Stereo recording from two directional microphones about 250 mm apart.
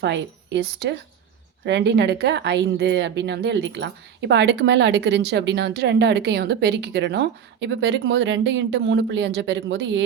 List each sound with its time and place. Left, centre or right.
0.0 s a woman's voice: right